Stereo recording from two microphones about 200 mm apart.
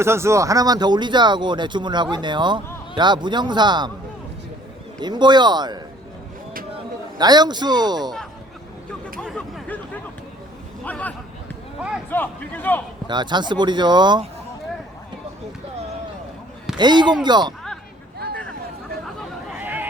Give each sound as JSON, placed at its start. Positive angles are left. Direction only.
{"t": 0.0, "sound": "speech", "side_deg": -15}
{"t": 4.9, "sound": "speech", "side_deg": -20}
{"t": 7.2, "sound": "speech", "side_deg": -20}
{"t": 9.2, "sound": "a sound", "side_deg": 0}
{"t": 10.8, "sound": "a man's voice", "side_deg": 5}
{"t": 11.8, "sound": "a sound", "side_deg": -5}
{"t": 12.1, "sound": "a man's voice", "side_deg": 10}
{"t": 13.1, "sound": "speech", "side_deg": -20}
{"t": 16.7, "sound": "speech", "side_deg": -20}
{"t": 19.5, "sound": "a sound", "side_deg": -10}